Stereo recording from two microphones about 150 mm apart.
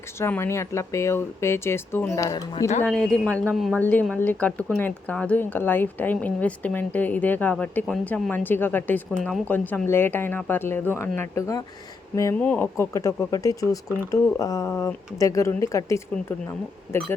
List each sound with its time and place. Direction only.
0.2 s speech: 15° left (ahead or behind)
2.8 s speech: 5° left (ahead or behind)